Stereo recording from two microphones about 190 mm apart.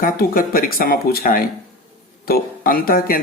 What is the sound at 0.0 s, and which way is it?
Speech, 50° left (ahead or behind).